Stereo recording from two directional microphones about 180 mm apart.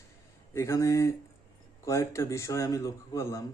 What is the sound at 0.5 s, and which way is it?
A man's voice, 15° left (ahead or behind).